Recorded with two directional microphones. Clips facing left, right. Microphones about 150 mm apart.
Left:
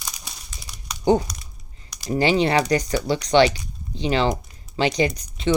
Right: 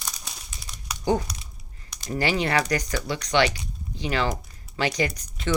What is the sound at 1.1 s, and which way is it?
Speech, 25° left (ahead or behind).